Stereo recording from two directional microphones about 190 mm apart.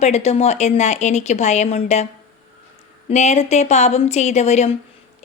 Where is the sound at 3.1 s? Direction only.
35° left (ahead or behind).